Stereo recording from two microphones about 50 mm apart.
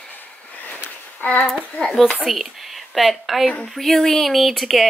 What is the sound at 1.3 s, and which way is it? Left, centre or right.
Speech, left.